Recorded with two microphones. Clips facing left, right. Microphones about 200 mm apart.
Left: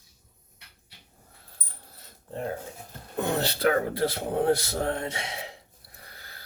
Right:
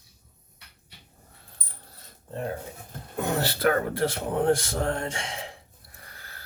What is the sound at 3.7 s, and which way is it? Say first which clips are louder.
A man's voice: even; 50° right (ahead or behind).